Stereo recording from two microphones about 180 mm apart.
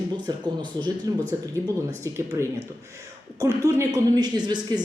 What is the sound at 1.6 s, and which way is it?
A woman's voice, 15° right (ahead or behind).